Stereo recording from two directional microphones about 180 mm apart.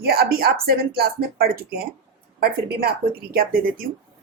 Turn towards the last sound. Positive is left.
turn(degrees=-55)  # may be behind; listen again after turning